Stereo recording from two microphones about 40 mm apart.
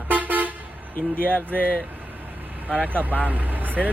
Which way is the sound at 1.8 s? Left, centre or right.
Right.